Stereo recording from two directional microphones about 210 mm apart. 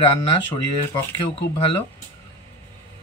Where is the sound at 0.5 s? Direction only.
25° left (ahead or behind).